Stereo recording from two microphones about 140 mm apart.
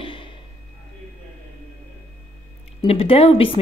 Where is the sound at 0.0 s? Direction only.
35° left (ahead or behind).